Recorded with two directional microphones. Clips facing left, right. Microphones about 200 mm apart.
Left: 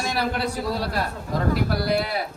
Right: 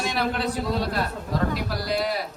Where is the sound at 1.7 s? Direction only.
55° left (ahead or behind).